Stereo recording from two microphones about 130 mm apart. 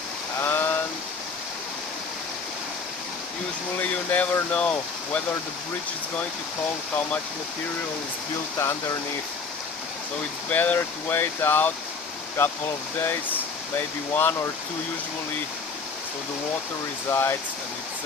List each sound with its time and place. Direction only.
0.4 s a sound: 15° left (ahead or behind)
3.7 s speech: 10° left (ahead or behind)
8.5 s speech: 20° left (ahead or behind)
10.5 s speech: 15° left (ahead or behind)
13.0 s speech: 15° left (ahead or behind)
17.1 s speech: 20° left (ahead or behind)